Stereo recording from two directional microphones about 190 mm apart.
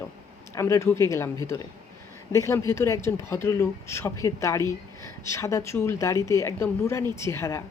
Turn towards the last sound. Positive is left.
turn(degrees=15)  # may be behind; listen again after turning